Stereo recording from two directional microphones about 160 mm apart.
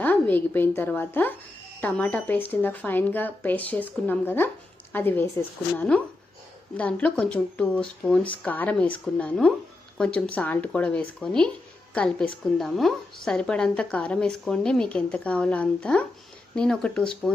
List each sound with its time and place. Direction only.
0.0 s a woman's voice: 10° left (ahead or behind)